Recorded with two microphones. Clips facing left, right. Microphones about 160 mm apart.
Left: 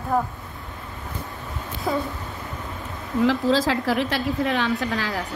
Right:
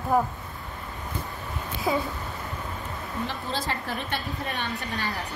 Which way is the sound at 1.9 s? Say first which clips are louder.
Left 1 dB; 5° right (ahead or behind).